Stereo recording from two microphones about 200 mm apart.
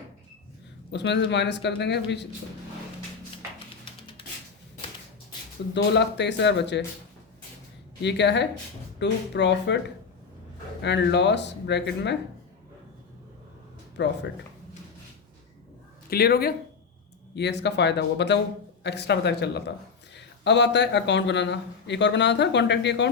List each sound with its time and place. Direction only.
0.9 s speech: 60° left (ahead or behind)
5.7 s speech: 60° left (ahead or behind)
8.0 s speech: 60° left (ahead or behind)
13.9 s speech: 60° left (ahead or behind)
16.0 s speech: 50° left (ahead or behind)